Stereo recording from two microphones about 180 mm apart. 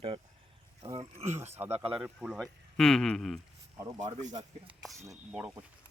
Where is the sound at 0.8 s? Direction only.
20° right (ahead or behind).